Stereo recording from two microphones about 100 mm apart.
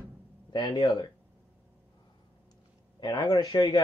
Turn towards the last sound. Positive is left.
turn(degrees=50)  # may be behind; listen again after turning